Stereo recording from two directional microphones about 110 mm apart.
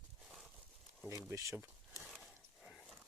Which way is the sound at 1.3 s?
30° right (ahead or behind).